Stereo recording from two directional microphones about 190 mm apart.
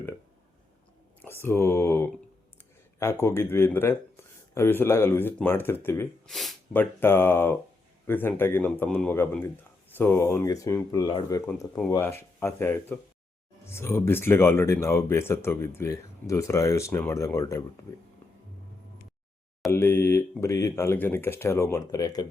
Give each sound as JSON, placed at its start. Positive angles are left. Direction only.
{"t": 1.2, "sound": "speech", "side_deg": 10}
{"t": 6.2, "sound": "a sound", "side_deg": 0}
{"t": 7.0, "sound": "speech", "side_deg": 10}
{"t": 19.7, "sound": "speech", "side_deg": 10}